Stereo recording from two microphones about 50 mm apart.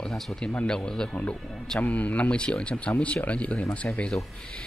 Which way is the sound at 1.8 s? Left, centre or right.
Left.